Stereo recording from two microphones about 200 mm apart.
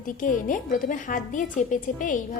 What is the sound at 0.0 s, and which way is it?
A woman's voice, 40° left (ahead or behind).